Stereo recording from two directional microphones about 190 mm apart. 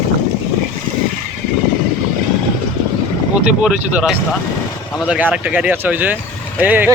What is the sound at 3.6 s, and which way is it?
Speech, 5° right (ahead or behind).